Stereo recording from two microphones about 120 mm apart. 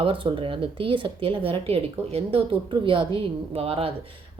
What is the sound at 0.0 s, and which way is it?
Speech, 45° right (ahead or behind).